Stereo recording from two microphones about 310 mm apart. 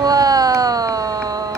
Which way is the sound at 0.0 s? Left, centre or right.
Centre.